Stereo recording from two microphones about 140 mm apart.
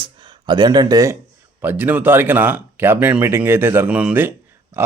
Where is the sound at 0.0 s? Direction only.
35° right (ahead or behind).